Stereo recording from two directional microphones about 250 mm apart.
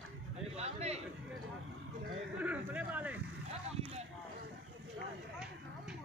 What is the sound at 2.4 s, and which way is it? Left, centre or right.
Speech, centre.